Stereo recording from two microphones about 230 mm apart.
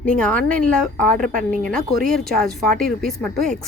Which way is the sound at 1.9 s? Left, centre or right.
Right.